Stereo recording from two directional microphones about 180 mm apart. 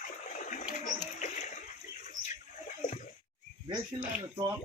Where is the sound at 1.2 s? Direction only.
40° left (ahead or behind).